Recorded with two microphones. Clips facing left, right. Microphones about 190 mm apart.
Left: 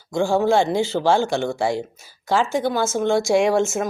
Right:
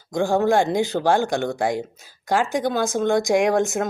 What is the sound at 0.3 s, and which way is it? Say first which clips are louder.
Speech: even; 15° right (ahead or behind).